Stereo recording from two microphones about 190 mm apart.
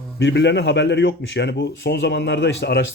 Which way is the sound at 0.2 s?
65° left (ahead or behind).